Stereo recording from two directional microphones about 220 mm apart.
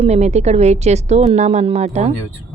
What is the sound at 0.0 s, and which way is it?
A woman's voice, 30° right (ahead or behind).